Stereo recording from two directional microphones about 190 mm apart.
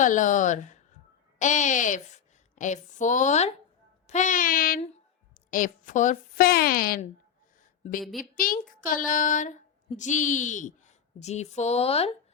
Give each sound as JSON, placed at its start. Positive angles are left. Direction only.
{"t": 0.0, "sound": "a woman's voice", "side_deg": 40}
{"t": 8.2, "sound": "speech", "side_deg": 45}